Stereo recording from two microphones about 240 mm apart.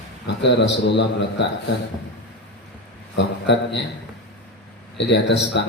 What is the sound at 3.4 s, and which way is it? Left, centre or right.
Speech, left.